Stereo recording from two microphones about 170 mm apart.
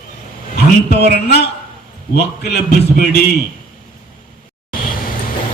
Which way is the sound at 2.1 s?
70° left (ahead or behind).